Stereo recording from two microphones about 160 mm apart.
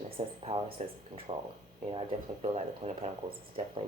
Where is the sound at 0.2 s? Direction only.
40° right (ahead or behind).